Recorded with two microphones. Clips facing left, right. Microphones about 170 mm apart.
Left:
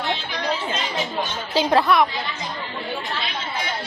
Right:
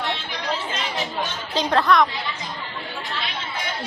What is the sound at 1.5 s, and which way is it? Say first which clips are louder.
Speech: left 1 dB; 5° left (ahead or behind).